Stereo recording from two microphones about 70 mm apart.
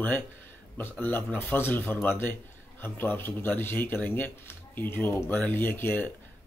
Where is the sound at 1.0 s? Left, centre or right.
Left.